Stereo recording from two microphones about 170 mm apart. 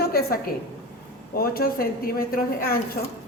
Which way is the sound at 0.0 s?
65° left (ahead or behind).